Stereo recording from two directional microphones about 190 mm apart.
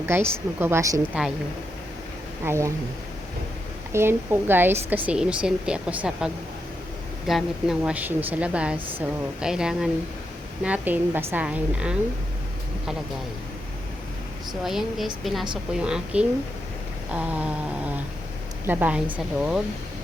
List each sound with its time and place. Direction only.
0.6 s a woman's voice: 15° right (ahead or behind)
2.4 s a woman's voice: 15° right (ahead or behind)
3.9 s a woman's voice: 10° right (ahead or behind)
14.6 s a woman's voice: centre (ahead or behind)